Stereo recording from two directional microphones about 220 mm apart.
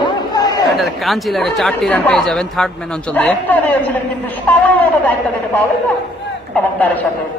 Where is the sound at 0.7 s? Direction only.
Centre (ahead or behind).